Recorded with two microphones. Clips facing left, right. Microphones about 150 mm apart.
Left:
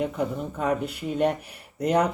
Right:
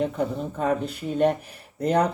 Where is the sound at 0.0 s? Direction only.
35° right (ahead or behind).